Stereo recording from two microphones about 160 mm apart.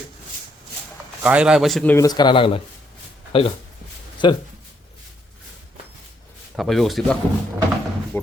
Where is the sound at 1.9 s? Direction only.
25° left (ahead or behind).